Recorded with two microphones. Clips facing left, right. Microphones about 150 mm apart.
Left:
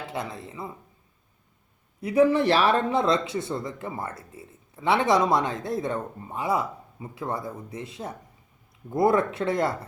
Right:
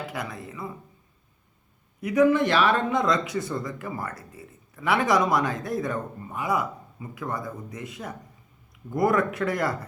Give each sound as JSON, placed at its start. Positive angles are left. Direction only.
{"t": 0.1, "sound": "speech", "side_deg": 25}
{"t": 2.0, "sound": "speech", "side_deg": 30}